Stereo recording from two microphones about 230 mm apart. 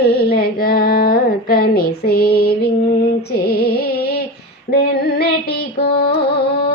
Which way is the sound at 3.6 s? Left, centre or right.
Left.